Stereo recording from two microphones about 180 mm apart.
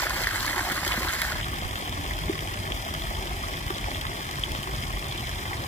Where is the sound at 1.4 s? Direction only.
40° left (ahead or behind).